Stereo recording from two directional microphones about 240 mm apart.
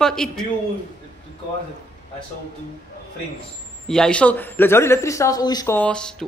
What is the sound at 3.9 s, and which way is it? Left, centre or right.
Speech, centre.